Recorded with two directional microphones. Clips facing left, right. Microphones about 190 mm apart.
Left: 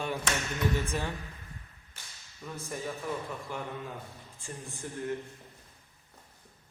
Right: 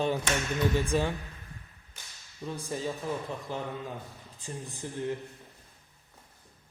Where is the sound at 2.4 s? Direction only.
20° right (ahead or behind).